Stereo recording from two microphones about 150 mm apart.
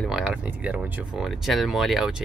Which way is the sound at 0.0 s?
5° right (ahead or behind).